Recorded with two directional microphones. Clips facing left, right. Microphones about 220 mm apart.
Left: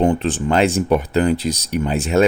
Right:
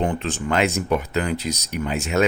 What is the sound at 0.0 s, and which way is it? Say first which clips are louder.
Speech: left 7 dB; 30° left (ahead or behind).